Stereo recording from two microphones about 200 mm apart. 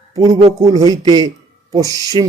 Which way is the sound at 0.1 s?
15° right (ahead or behind).